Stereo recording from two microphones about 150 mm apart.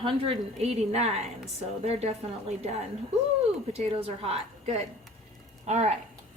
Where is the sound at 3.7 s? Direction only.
40° right (ahead or behind).